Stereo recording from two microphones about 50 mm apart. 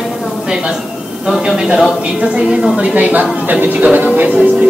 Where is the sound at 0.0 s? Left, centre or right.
Centre.